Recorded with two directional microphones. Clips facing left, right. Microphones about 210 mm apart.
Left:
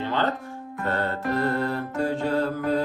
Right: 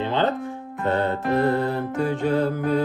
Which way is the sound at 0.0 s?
20° right (ahead or behind).